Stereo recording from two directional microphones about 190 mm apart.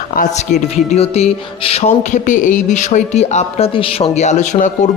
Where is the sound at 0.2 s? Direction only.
35° left (ahead or behind).